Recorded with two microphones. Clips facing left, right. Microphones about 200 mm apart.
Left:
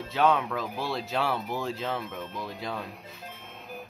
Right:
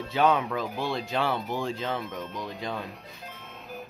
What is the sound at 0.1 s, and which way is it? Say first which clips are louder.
Speech: right 1 dB; centre (ahead or behind).